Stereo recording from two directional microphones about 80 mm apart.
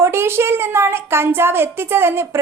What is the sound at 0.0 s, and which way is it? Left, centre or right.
A child's voice, right.